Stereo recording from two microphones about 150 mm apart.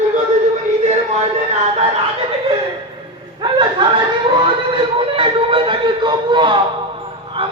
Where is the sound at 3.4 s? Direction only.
30° right (ahead or behind).